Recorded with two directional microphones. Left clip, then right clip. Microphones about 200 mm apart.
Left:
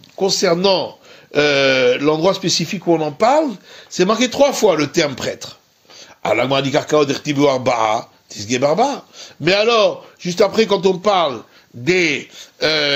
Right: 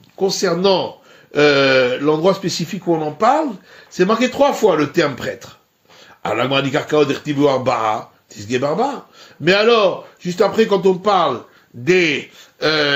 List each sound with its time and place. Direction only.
0.2 s speech: 30° left (ahead or behind)